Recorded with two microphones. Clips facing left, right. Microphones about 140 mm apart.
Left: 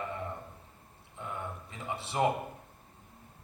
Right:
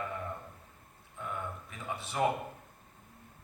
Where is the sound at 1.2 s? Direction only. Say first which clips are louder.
Even; 25° left (ahead or behind).